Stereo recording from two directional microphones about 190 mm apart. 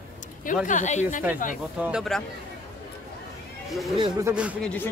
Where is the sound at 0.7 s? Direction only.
40° left (ahead or behind).